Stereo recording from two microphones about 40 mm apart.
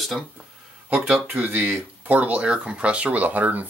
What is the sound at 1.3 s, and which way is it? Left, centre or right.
Speech, right.